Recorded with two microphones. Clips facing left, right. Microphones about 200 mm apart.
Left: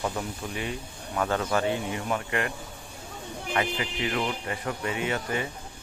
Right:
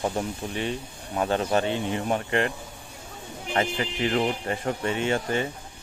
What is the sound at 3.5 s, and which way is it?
Speech, 40° right (ahead or behind).